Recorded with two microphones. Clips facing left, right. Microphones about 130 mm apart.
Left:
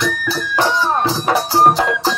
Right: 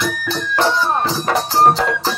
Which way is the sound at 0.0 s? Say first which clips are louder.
Left 1 dB; 5° left (ahead or behind).